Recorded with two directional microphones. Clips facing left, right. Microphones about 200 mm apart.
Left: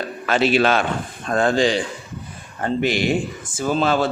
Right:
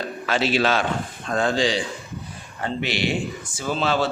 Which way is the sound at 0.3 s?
55° left (ahead or behind).